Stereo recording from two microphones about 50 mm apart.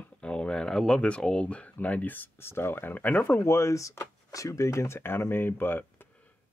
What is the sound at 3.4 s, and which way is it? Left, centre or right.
Speech, left.